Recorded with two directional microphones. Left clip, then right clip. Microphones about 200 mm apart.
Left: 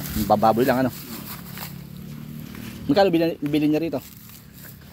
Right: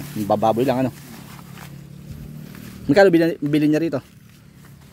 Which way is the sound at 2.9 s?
65° right (ahead or behind).